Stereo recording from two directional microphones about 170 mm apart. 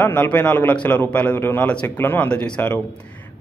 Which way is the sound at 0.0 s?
10° left (ahead or behind).